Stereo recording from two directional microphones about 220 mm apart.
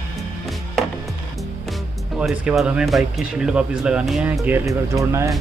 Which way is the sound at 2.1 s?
5° right (ahead or behind).